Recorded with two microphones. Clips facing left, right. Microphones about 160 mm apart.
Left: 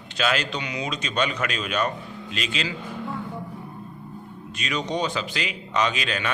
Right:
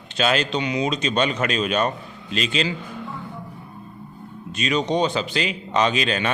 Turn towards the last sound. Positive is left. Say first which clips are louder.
# right 4 dB
turn(degrees=-25)  # may be behind; listen again after turning